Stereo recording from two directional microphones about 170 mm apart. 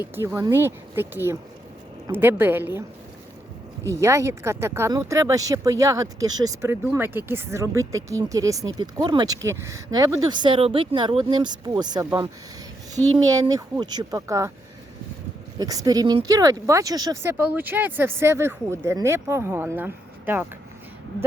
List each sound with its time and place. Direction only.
0.3 s speech: 15° right (ahead or behind)
3.8 s speech: 15° right (ahead or behind)
15.5 s speech: 20° right (ahead or behind)